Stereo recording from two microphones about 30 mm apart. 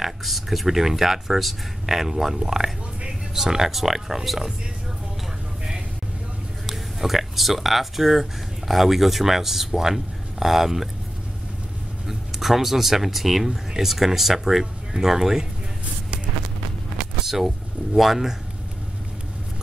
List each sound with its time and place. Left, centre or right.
0.0 s speech: centre
3.1 s a sound: centre
3.7 s speech: centre
6.6 s speech: centre
12.1 s speech: centre
17.9 s speech: centre